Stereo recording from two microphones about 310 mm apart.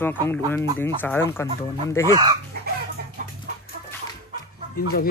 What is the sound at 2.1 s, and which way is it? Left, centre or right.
Speech, centre.